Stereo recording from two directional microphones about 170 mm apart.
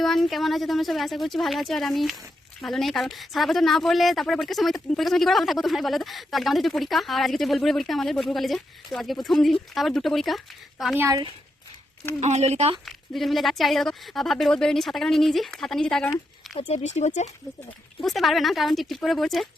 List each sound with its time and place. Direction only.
0.0 s speech: centre (ahead or behind)
10.9 s speech: 15° right (ahead or behind)
12.2 s speech: 40° right (ahead or behind)
12.8 s speech: centre (ahead or behind)
16.6 s speech: 40° left (ahead or behind)
18.0 s speech: centre (ahead or behind)